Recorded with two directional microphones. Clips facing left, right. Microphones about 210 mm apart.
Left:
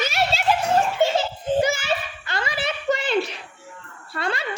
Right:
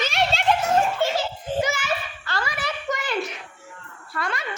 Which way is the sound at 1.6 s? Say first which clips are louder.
Even; 30° left (ahead or behind).